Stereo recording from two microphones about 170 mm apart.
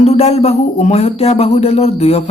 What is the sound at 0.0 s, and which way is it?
Speech, 40° left (ahead or behind).